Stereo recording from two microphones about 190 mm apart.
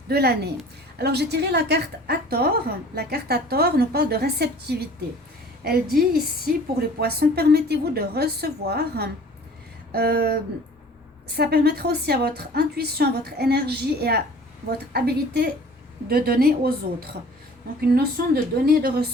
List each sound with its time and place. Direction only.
0.1 s a woman's voice: 55° right (ahead or behind)
11.3 s a woman's voice: 55° right (ahead or behind)